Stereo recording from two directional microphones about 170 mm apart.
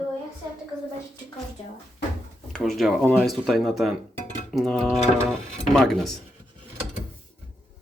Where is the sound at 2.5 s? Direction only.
Centre (ahead or behind).